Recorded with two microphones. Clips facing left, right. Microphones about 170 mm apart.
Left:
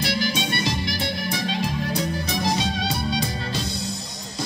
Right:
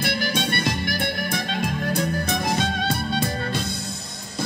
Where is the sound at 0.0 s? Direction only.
55° right (ahead or behind).